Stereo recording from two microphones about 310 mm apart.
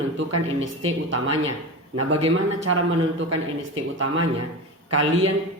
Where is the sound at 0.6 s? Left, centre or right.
Right.